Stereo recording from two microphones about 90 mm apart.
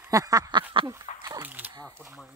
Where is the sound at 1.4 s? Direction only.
20° right (ahead or behind).